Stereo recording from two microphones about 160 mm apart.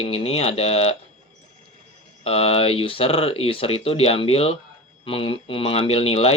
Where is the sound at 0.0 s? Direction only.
35° left (ahead or behind).